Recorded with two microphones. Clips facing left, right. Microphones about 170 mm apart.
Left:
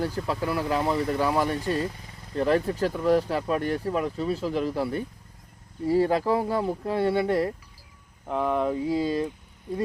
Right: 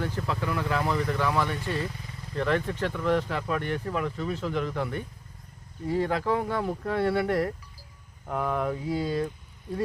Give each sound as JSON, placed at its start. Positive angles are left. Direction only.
{"t": 0.2, "sound": "speech", "side_deg": 30}